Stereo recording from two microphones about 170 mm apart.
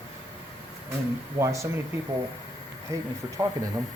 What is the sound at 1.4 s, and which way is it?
Speech, 15° right (ahead or behind).